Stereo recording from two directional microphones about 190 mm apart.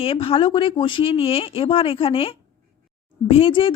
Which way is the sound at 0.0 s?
30° left (ahead or behind).